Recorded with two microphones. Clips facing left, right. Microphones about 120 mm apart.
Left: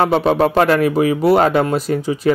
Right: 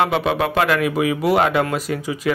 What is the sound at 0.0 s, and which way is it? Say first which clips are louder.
Speech: left 5 dB; 40° left (ahead or behind).